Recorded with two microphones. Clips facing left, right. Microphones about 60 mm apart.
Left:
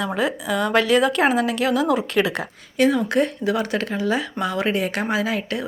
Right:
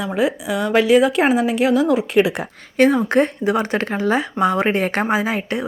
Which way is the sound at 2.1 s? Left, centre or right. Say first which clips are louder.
Right 4 dB; right.